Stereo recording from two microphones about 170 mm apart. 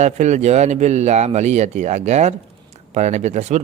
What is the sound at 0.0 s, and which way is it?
Speech, 45° right (ahead or behind).